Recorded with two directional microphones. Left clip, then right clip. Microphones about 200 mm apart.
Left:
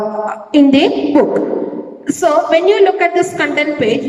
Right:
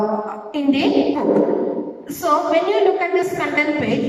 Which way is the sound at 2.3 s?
50° left (ahead or behind).